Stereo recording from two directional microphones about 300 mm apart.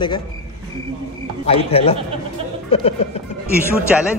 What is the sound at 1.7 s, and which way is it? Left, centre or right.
Music, centre.